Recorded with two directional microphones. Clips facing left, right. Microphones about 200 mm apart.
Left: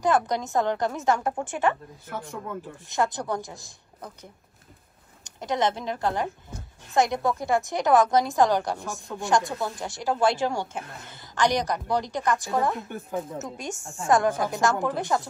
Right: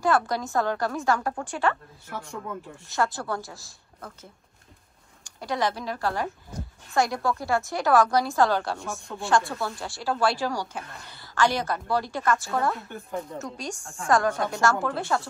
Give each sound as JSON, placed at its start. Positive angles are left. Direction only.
{"t": 0.0, "sound": "a woman's voice", "side_deg": 20}
{"t": 2.0, "sound": "speech", "side_deg": 0}
{"t": 2.9, "sound": "a woman's voice", "side_deg": 20}
{"t": 8.7, "sound": "speech", "side_deg": 0}
{"t": 9.2, "sound": "speech", "side_deg": 15}
{"t": 12.9, "sound": "speech", "side_deg": 5}
{"t": 13.4, "sound": "a woman's voice", "side_deg": 20}
{"t": 14.3, "sound": "speech", "side_deg": 0}
{"t": 14.6, "sound": "speech", "side_deg": 15}